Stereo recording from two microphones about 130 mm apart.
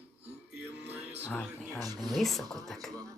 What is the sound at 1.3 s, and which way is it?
Speech, 10° left (ahead or behind).